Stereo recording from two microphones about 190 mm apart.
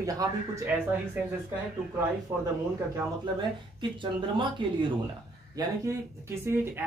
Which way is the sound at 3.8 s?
25° right (ahead or behind).